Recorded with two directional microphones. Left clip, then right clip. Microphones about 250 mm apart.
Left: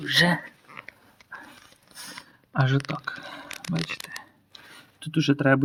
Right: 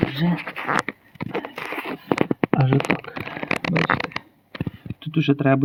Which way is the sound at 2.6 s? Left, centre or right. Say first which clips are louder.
Right 6 dB; centre.